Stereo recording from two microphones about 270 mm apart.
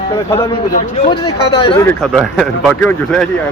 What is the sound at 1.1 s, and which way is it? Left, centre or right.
Speech, centre.